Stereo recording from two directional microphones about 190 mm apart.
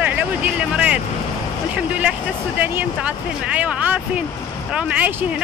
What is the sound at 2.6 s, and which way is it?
Speech, 10° right (ahead or behind).